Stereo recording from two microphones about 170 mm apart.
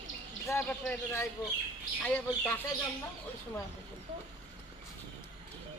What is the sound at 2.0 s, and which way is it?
Speech, 10° left (ahead or behind).